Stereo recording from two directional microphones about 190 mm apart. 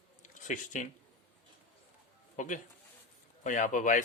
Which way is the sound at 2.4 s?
40° left (ahead or behind).